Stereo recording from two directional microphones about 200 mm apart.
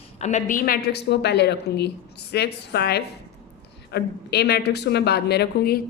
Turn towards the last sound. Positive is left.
turn(degrees=55)  # may be behind; listen again after turning